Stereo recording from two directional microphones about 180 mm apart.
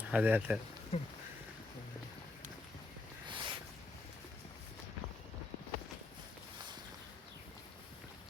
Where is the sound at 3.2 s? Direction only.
25° right (ahead or behind).